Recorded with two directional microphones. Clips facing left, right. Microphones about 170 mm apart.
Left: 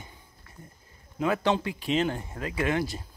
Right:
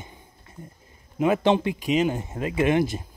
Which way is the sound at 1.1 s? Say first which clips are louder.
Right 5 dB; 20° right (ahead or behind).